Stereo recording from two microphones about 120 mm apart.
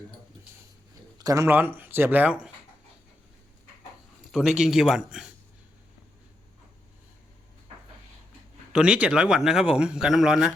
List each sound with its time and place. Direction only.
1.2 s speech: 25° right (ahead or behind); by 2.5 s 10° right (ahead or behind)
4.3 s a man's voice: 5° right (ahead or behind)
8.7 s speech: 10° right (ahead or behind)